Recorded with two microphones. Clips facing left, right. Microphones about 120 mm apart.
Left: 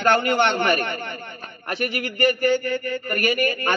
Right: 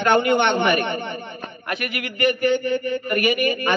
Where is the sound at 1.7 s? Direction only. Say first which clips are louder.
Left 2 dB; 35° left (ahead or behind).